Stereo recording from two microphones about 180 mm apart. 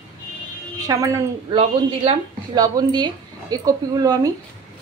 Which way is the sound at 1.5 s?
30° right (ahead or behind).